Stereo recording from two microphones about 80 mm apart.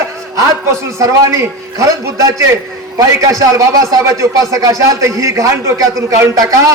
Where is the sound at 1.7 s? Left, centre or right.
Right.